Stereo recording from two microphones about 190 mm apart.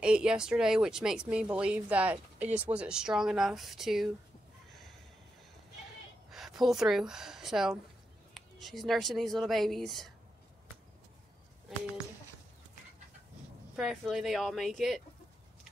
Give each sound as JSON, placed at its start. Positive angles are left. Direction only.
{"t": 0.0, "sound": "speech", "side_deg": -5}
{"t": 6.3, "sound": "speech", "side_deg": 0}
{"t": 13.7, "sound": "speech", "side_deg": 0}